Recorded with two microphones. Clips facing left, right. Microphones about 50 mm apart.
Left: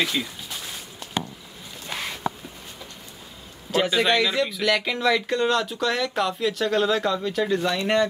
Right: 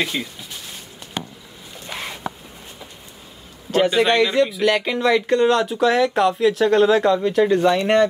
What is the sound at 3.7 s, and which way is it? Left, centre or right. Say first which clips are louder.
Speech: right 4 dB; centre.